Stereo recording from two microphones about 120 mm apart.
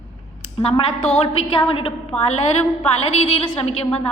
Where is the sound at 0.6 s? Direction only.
50° left (ahead or behind).